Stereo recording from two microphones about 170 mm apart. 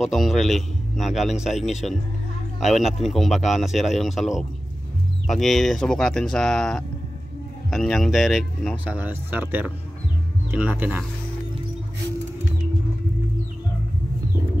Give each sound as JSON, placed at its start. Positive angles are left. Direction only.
{"t": 0.0, "sound": "speech", "side_deg": 0}